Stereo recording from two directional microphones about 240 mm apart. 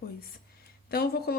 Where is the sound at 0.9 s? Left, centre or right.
Left.